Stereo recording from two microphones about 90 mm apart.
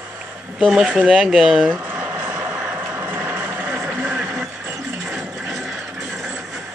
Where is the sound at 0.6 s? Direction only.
5° right (ahead or behind).